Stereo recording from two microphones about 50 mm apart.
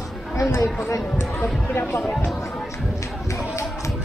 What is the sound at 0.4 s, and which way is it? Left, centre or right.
Speech, left.